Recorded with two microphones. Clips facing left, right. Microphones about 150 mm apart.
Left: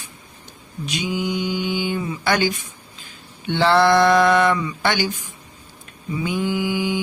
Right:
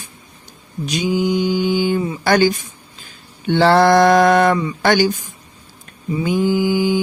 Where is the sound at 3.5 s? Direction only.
40° right (ahead or behind).